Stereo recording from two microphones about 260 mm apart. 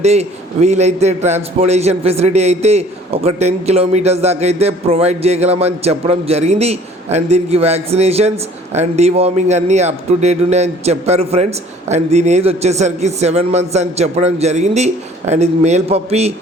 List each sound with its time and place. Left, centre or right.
0.0 s a man's voice: right